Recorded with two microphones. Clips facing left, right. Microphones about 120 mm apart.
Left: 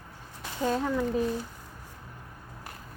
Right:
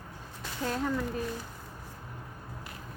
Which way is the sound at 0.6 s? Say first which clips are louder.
Left 4 dB; 15° left (ahead or behind).